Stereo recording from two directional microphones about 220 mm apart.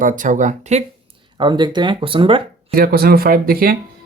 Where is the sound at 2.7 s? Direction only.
40° right (ahead or behind).